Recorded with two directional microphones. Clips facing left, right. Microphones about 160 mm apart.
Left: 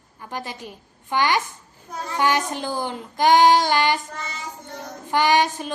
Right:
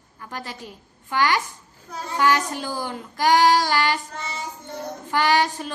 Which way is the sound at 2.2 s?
20° left (ahead or behind).